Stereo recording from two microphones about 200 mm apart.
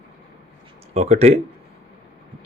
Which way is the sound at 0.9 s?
30° right (ahead or behind).